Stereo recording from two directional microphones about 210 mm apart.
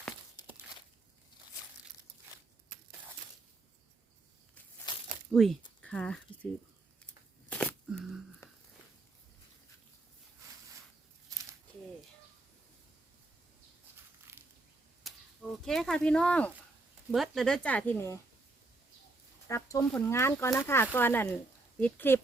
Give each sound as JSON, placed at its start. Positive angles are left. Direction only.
{"t": 4.9, "sound": "crumpling", "side_deg": 20}
{"t": 5.3, "sound": "speech", "side_deg": 0}
{"t": 7.5, "sound": "a sound", "side_deg": 5}
{"t": 8.4, "sound": "a sound", "side_deg": 15}
{"t": 15.1, "sound": "arrow", "side_deg": 0}
{"t": 15.6, "sound": "speech", "side_deg": 0}
{"t": 19.5, "sound": "speech", "side_deg": 15}